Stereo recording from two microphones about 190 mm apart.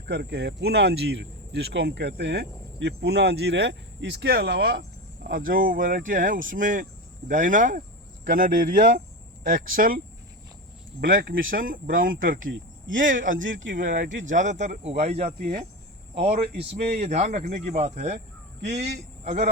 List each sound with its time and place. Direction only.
0.1 s speech: 60° right (ahead or behind)
11.0 s speech: 50° right (ahead or behind)
13.4 s speech: 80° right
13.9 s speech: 45° right (ahead or behind)
15.4 s speech: 45° right (ahead or behind)
16.2 s a man's voice: 35° right (ahead or behind)